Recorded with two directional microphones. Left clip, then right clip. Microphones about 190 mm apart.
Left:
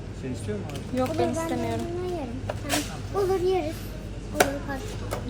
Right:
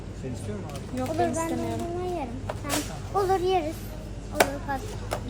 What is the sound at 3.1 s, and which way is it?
Speech, 15° right (ahead or behind).